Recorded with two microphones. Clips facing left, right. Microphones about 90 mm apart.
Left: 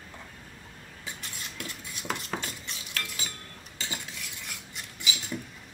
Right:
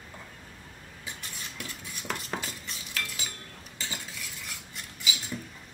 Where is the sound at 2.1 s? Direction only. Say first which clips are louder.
Left 1 dB; centre (ahead or behind).